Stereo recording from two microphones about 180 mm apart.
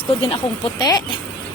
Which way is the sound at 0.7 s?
20° left (ahead or behind).